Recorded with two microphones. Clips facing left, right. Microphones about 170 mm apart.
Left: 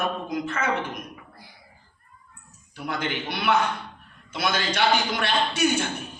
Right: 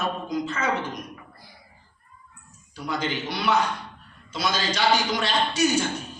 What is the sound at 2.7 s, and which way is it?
Speech, 55° left (ahead or behind).